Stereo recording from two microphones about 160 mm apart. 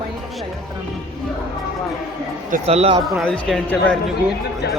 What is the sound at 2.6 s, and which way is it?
Speech, 40° right (ahead or behind).